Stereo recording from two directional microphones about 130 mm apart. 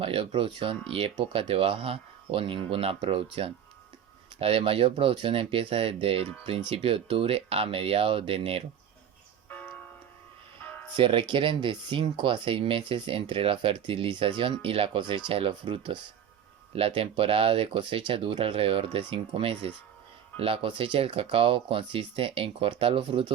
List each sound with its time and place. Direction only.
0.0 s speech: 45° right (ahead or behind)
4.4 s speech: 45° right (ahead or behind)
9.5 s music: 15° left (ahead or behind)
10.9 s speech: 40° right (ahead or behind)